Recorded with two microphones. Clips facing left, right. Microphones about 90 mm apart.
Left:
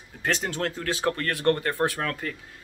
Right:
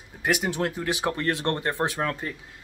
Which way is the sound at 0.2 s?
10° right (ahead or behind).